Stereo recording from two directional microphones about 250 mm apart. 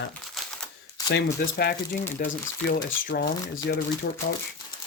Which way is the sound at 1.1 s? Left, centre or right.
Left.